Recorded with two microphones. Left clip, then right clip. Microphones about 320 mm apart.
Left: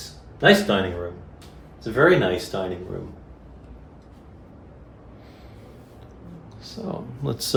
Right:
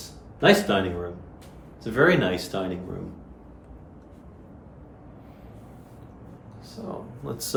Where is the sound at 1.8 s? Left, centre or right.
Centre.